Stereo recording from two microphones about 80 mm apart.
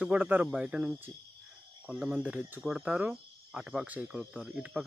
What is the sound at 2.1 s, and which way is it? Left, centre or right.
Speech, centre.